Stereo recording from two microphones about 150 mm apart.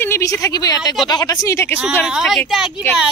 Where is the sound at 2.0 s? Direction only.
5° right (ahead or behind).